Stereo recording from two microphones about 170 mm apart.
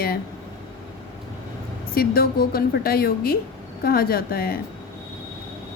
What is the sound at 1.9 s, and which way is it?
A woman's voice, 60° left (ahead or behind).